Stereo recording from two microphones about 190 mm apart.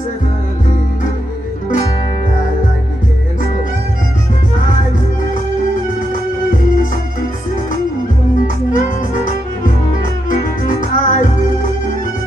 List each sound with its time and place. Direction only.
8.7 s music: 45° left (ahead or behind)